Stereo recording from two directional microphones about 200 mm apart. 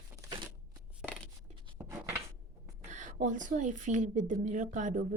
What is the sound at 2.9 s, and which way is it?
Speech, 40° right (ahead or behind).